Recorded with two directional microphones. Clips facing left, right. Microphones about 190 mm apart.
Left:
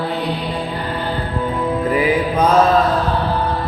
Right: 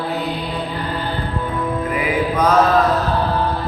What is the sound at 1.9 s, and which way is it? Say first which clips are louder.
Music: left 2 dB; 30° left (ahead or behind).